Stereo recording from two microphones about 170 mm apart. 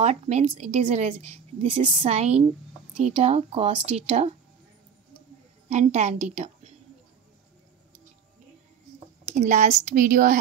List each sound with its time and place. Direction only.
0.0 s a woman's voice: 40° right (ahead or behind)
5.7 s a woman's voice: 40° right (ahead or behind)
9.4 s a woman's voice: 45° right (ahead or behind)